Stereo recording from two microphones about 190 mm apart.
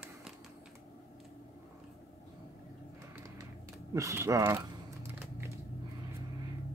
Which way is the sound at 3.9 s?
15° right (ahead or behind).